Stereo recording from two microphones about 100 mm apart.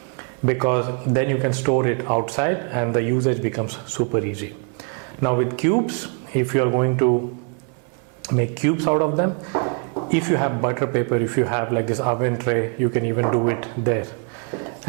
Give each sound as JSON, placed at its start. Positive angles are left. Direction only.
{"t": 0.4, "sound": "speech", "side_deg": -15}
{"t": 5.2, "sound": "speech", "side_deg": -20}
{"t": 8.4, "sound": "speech", "side_deg": -15}